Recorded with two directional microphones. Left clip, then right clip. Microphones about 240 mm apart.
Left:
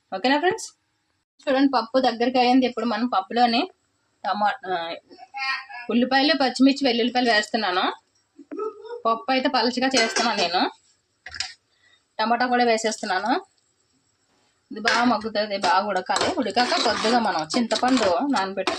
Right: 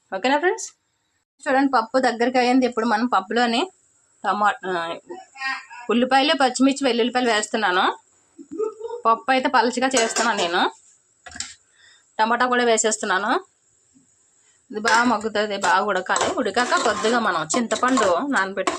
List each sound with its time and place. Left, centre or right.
0.1 s speech: centre
9.0 s speech: centre
12.1 s speech: centre
14.7 s speech: centre